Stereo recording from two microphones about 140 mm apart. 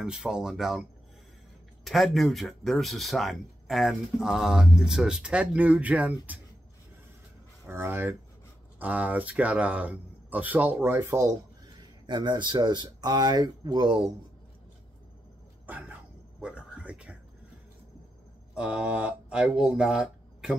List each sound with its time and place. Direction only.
0.0 s speech: 5° right (ahead or behind)
1.9 s speech: centre (ahead or behind)
7.6 s speech: 15° right (ahead or behind)
15.6 s a sound: 10° right (ahead or behind)
18.5 s speech: 5° right (ahead or behind)